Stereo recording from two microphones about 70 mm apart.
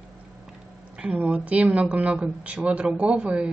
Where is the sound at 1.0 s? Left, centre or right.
Right.